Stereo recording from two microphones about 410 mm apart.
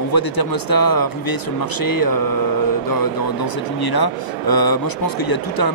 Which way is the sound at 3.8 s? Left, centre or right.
Left.